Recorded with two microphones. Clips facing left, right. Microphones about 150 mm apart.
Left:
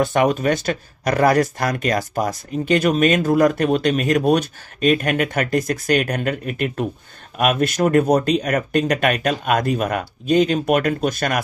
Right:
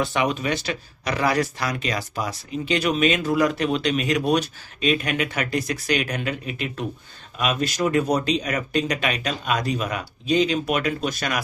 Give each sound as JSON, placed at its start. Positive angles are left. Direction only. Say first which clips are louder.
{"t": 0.0, "sound": "speech", "louder": "left 6 dB", "side_deg": 50}